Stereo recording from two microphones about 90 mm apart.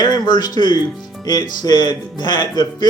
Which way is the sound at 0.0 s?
50° left (ahead or behind).